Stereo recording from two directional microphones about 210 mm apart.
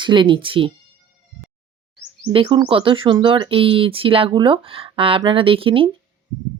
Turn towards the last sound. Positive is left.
turn(degrees=-25)  # may be behind; listen again after turning